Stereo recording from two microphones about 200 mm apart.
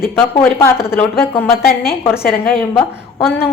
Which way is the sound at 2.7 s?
5° left (ahead or behind).